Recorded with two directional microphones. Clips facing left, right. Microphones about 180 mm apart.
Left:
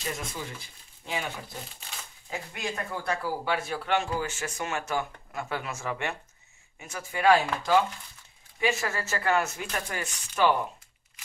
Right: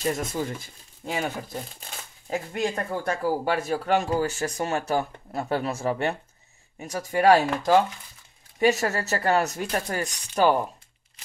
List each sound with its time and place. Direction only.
0.0 s speech: 45° right (ahead or behind)